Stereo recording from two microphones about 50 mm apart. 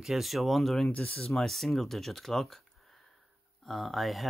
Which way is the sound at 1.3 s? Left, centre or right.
Centre.